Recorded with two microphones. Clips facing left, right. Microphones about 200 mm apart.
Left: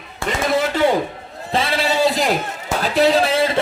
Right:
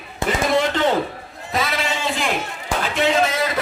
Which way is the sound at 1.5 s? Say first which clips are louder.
Left 4 dB; 30° left (ahead or behind).